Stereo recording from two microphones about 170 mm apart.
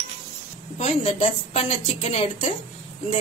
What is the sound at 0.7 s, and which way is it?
Speech, 40° left (ahead or behind).